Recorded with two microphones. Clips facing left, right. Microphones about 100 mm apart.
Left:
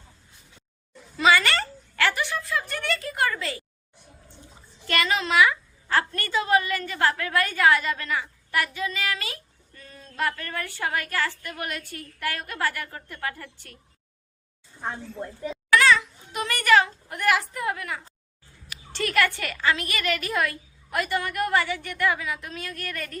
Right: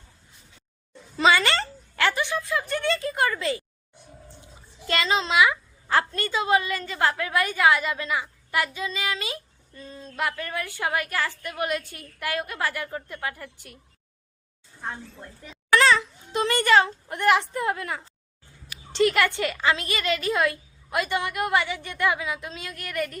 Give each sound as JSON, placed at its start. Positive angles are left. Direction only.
{"t": 1.1, "sound": "a sound", "side_deg": -25}
{"t": 4.9, "sound": "a woman's voice", "side_deg": -20}
{"t": 14.8, "sound": "a woman's voice", "side_deg": 15}
{"t": 15.7, "sound": "a child's voice", "side_deg": -30}